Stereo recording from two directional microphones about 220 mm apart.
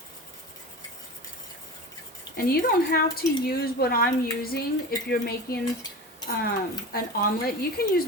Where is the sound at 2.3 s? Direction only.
45° left (ahead or behind).